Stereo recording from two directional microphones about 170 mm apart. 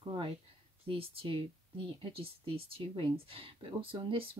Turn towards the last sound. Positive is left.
turn(degrees=-30)  # may be behind; listen again after turning